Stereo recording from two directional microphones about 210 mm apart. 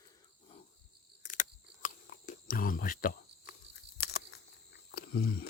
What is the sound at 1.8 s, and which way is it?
Cricket, 45° left (ahead or behind).